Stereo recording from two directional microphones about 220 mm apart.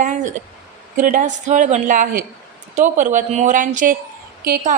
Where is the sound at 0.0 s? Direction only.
35° right (ahead or behind).